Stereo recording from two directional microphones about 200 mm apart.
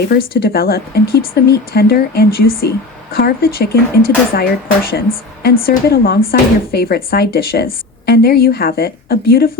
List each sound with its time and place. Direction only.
0.1 s a woman's voice: 50° left (ahead or behind)